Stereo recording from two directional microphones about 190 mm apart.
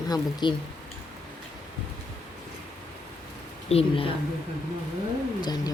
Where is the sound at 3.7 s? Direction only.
30° left (ahead or behind).